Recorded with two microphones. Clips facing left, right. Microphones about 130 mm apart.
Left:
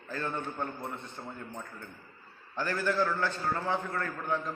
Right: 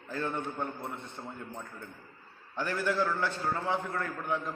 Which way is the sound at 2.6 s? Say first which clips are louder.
Left 1 dB; 15° right (ahead or behind).